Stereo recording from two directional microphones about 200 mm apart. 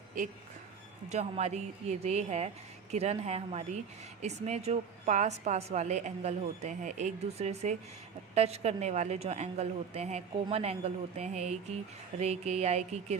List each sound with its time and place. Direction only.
1.1 s a woman's voice: 35° right (ahead or behind)